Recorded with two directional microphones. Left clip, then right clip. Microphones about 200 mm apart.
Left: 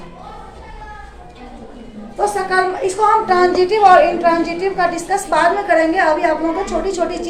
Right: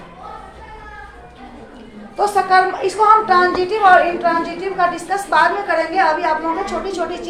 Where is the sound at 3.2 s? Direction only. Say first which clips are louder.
Left 1 dB; 10° left (ahead or behind).